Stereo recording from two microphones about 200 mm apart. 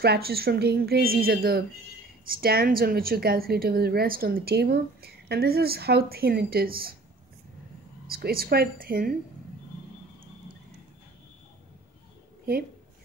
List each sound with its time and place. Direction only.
0.0 s a woman's voice: 50° right (ahead or behind)
8.1 s a woman's voice: 50° right (ahead or behind)